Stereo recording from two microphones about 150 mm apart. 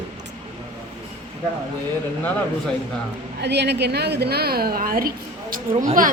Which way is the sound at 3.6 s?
90° right.